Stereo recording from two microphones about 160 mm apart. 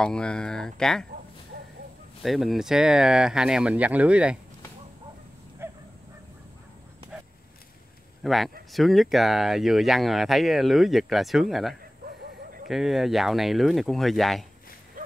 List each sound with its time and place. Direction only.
0.0 s speech: 5° left (ahead or behind)
2.2 s speech: centre (ahead or behind)
5.6 s dog: 15° right (ahead or behind)
8.2 s speech: centre (ahead or behind)
12.1 s owl: 60° right (ahead or behind)
12.6 s speech: centre (ahead or behind)